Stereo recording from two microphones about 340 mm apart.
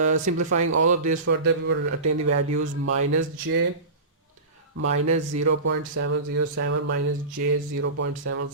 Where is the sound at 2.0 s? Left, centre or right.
Right.